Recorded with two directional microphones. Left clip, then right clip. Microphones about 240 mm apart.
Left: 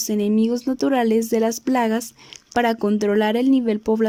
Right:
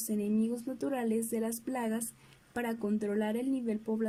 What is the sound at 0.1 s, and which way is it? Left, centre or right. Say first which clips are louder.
Speech: left 12 dB; left.